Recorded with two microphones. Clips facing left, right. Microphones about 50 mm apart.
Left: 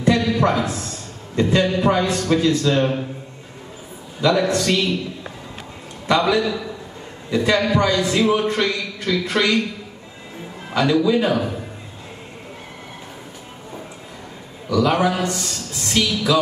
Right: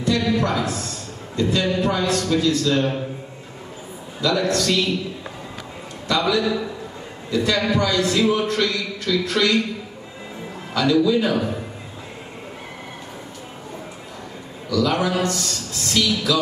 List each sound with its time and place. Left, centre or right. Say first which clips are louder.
0.0 s a sound: left 3 dB; left
1.3 s a man's voice: left 3 dB; left
4.2 s a man's voice: left 3 dB; left
6.0 s a man's voice: left 2 dB; left
10.7 s a man's voice: left 1 dB; left
14.7 s a man's voice: left 3 dB; left